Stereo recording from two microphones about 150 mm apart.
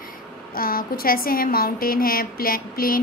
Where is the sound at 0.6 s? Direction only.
75° left (ahead or behind).